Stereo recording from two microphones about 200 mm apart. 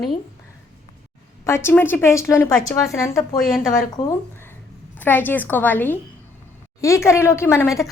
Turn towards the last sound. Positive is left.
turn(degrees=15)  # may be behind; listen again after turning